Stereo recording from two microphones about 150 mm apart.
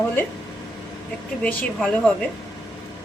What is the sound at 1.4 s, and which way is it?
Speech, 5° left (ahead or behind).